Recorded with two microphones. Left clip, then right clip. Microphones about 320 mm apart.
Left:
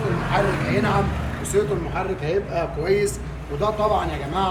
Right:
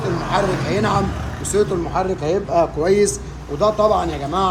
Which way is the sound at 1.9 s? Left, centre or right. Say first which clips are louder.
Right 5 dB; right.